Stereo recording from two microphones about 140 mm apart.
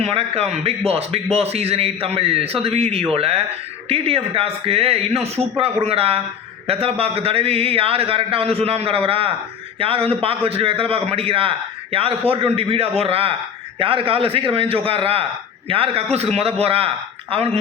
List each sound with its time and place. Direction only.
0.0 s a man's voice: 45° right (ahead or behind)